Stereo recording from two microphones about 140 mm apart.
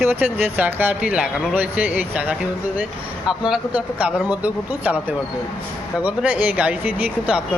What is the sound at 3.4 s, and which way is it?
Speech, 5° right (ahead or behind).